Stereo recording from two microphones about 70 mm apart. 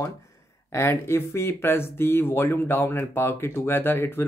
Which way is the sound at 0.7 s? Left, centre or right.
Left.